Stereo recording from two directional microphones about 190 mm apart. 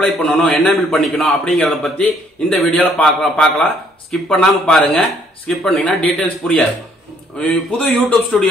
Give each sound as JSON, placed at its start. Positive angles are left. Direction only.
{"t": 0.0, "sound": "a man's voice", "side_deg": 5}